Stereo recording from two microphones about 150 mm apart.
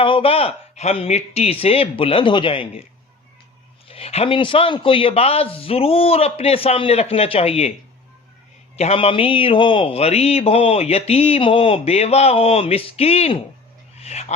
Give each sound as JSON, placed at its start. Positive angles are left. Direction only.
{"t": 0.0, "sound": "a man's voice", "side_deg": 35}
{"t": 3.8, "sound": "a man's voice", "side_deg": 40}
{"t": 8.7, "sound": "a man's voice", "side_deg": 40}
{"t": 14.0, "sound": "a sound", "side_deg": 45}